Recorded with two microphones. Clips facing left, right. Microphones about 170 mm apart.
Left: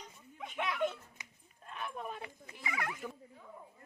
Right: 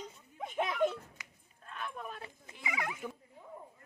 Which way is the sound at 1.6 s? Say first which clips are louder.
Even; 15° left (ahead or behind).